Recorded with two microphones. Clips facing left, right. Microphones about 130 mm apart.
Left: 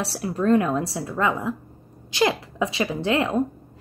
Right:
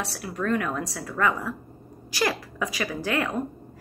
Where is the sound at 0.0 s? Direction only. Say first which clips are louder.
Left 5 dB; 30° left (ahead or behind).